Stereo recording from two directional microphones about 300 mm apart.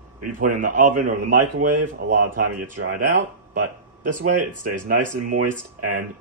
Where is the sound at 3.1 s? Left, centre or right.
Right.